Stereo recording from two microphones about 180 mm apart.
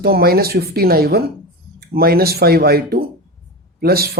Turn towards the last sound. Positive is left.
turn(degrees=-60)  # may be behind; listen again after turning